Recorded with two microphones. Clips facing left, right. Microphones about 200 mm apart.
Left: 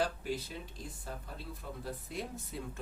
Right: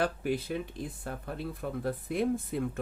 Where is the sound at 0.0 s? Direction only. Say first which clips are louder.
Right 5 dB; 60° right (ahead or behind).